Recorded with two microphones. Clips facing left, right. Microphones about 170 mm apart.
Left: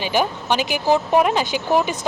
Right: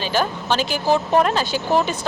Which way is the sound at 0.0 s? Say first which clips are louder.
Left 1 dB; 15° left (ahead or behind).